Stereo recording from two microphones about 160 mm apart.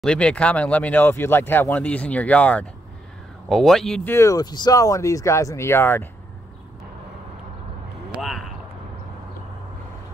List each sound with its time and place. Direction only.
0.0 s speech: 5° left (ahead or behind)
4.1 s speech: 20° left (ahead or behind)
8.2 s speech: centre (ahead or behind)